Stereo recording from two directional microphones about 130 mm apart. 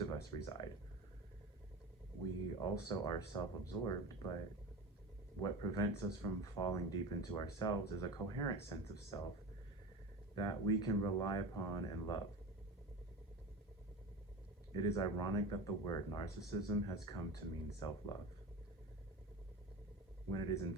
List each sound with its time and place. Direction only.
0.0 s speech: 30° left (ahead or behind)
2.6 s speech: 35° left (ahead or behind)
5.4 s speech: 30° left (ahead or behind)
10.3 s speech: 35° left (ahead or behind)
14.8 s speech: 35° left (ahead or behind)
20.3 s speech: 35° left (ahead or behind)